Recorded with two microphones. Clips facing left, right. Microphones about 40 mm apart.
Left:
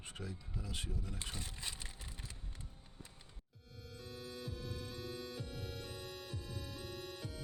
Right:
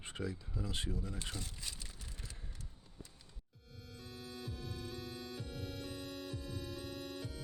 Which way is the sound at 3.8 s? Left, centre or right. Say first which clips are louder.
Left 1 dB; centre.